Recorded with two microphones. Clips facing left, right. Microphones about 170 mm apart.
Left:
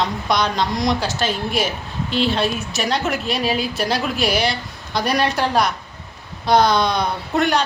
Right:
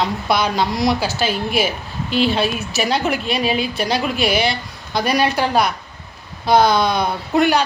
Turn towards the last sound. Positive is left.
turn(degrees=-5)  # may be behind; listen again after turning